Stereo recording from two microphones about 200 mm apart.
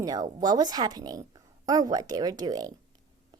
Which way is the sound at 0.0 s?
20° right (ahead or behind).